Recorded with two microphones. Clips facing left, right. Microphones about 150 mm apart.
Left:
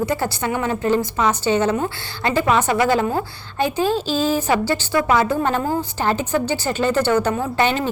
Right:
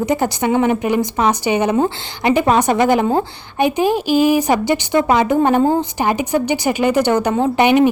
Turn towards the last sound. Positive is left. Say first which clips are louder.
# right 7 dB
turn(degrees=-15)  # may be behind; listen again after turning